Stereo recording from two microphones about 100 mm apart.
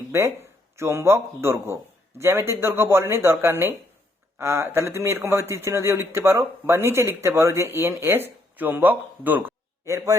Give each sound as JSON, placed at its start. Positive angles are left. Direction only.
{"t": 0.1, "sound": "speech", "side_deg": -30}